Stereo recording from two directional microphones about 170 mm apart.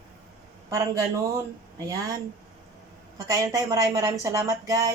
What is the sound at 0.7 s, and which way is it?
Speech, 20° right (ahead or behind).